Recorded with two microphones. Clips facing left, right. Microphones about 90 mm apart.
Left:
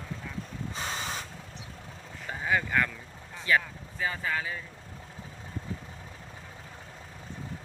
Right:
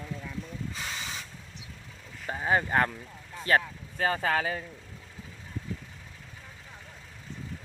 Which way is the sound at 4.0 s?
70° right (ahead or behind).